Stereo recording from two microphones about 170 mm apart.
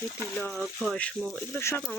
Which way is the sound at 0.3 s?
Centre (ahead or behind).